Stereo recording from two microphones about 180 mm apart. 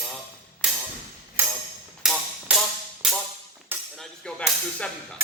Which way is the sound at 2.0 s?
Centre (ahead or behind).